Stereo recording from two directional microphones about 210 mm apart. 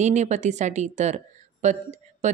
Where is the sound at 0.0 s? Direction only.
35° right (ahead or behind).